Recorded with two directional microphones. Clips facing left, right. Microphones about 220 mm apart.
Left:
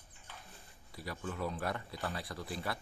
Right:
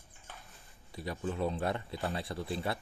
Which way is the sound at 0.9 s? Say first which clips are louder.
Right 5 dB; 25° right (ahead or behind).